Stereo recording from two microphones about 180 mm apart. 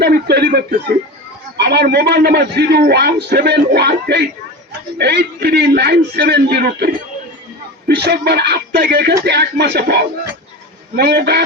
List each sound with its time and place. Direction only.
0.0 s a man's voice: 60° right (ahead or behind)